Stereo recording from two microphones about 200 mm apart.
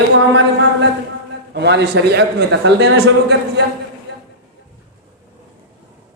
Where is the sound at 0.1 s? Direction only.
65° right (ahead or behind).